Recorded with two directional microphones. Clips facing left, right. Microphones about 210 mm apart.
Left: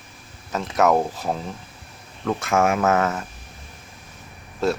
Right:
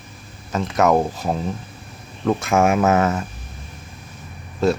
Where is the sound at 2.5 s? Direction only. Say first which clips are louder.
Right 2 dB; 25° right (ahead or behind).